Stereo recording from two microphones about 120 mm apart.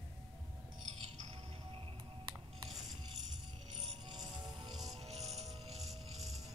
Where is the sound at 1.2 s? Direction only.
50° right (ahead or behind).